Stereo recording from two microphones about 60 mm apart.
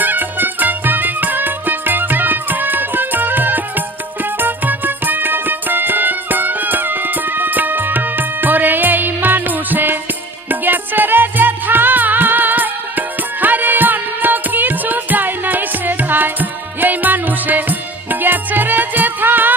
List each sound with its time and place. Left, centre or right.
0.0 s music: right